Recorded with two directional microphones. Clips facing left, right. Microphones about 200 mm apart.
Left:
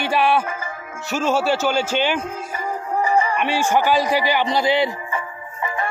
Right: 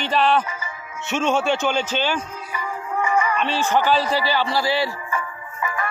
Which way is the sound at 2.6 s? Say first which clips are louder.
Left 2 dB; 35° left (ahead or behind).